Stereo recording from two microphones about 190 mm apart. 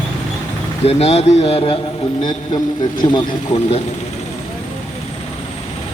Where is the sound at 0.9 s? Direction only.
35° left (ahead or behind).